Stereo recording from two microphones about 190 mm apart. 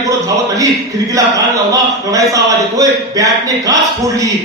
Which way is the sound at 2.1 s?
20° right (ahead or behind).